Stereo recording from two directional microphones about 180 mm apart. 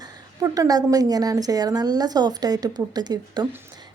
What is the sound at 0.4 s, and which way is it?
A woman's voice, 20° right (ahead or behind).